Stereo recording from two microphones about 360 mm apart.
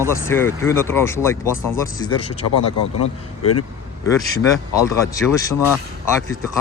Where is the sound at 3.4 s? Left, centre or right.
Left.